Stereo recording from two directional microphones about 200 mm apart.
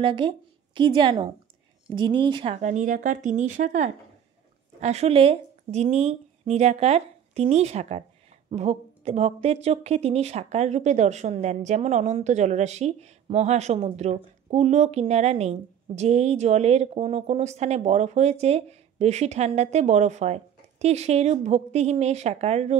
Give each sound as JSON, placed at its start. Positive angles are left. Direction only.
{"t": 0.0, "sound": "a woman's voice", "side_deg": -25}